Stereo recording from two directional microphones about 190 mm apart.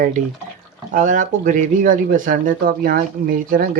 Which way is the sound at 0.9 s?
40° right (ahead or behind).